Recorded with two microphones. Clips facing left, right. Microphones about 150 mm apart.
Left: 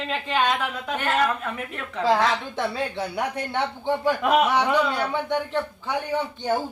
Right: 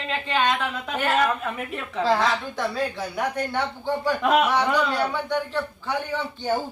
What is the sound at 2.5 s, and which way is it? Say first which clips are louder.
Speech: even; 25° left (ahead or behind).